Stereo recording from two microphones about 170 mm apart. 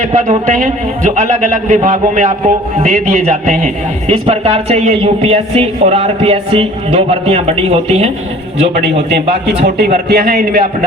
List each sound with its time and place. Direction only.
0.1 s a man's voice: 45° right (ahead or behind)
9.6 s a man's voice: 70° right (ahead or behind)